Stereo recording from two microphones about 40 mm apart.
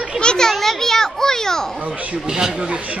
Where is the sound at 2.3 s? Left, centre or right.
Centre.